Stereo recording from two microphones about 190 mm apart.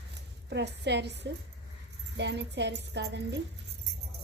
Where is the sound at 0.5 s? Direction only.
65° right (ahead or behind).